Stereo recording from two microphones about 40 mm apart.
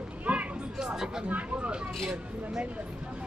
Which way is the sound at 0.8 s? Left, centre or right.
Centre.